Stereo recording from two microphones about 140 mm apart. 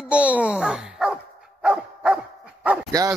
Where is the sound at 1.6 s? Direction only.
5° right (ahead or behind).